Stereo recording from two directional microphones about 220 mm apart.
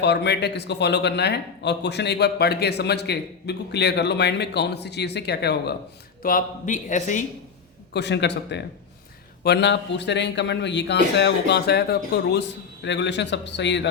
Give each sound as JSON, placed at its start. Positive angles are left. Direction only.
{"t": 0.0, "sound": "a man's voice", "side_deg": 50}
{"t": 6.2, "sound": "a man's voice", "side_deg": 35}
{"t": 7.9, "sound": "a man's voice", "side_deg": 50}